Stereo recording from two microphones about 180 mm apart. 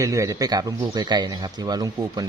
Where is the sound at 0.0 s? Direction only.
15° right (ahead or behind).